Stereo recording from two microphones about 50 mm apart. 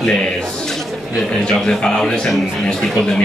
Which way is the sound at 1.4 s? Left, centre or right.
Centre.